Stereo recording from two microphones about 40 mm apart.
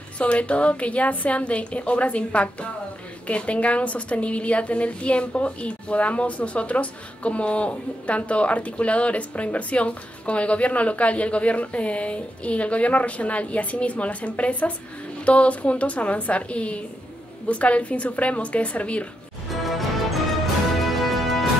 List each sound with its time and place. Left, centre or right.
0.2 s a woman's voice: left
19.5 s music: centre